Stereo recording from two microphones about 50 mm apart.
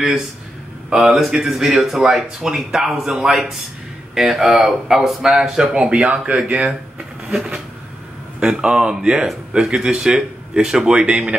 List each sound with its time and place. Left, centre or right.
0.8 s speech: centre
1.1 s speech: centre